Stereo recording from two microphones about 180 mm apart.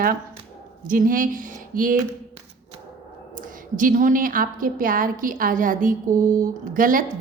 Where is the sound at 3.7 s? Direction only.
45° right (ahead or behind).